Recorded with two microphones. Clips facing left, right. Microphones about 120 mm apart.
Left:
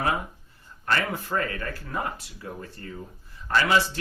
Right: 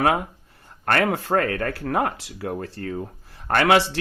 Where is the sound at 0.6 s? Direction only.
60° right (ahead or behind).